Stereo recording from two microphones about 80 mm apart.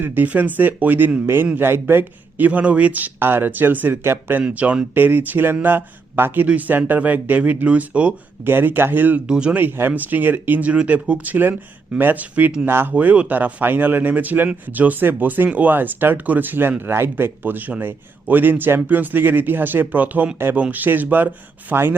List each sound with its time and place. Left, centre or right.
0.0 s speech: right
4.4 s speech: centre
8.4 s speech: right
9.2 s speech: centre
12.6 s speech: right